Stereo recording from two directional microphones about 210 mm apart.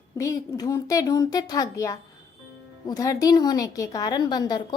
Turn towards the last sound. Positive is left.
turn(degrees=20)  # may be behind; listen again after turning